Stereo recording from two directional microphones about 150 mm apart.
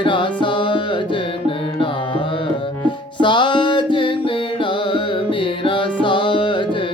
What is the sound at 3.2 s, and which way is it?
Music, 30° left (ahead or behind).